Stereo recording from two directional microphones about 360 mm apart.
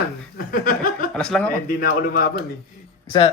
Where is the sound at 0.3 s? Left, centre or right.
Left.